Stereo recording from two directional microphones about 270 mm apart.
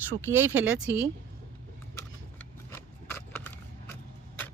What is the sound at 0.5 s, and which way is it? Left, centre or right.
Speech, right.